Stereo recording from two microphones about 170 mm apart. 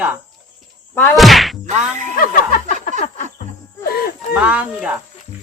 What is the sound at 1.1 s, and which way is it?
Speech, centre (ahead or behind).